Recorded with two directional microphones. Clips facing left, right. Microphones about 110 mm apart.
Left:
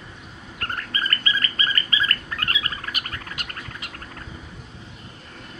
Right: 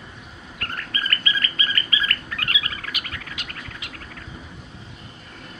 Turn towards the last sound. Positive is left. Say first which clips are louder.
# left 1 dB
turn(degrees=40)  # may be behind; listen again after turning